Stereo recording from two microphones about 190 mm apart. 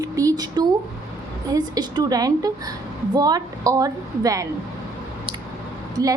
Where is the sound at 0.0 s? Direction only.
20° right (ahead or behind).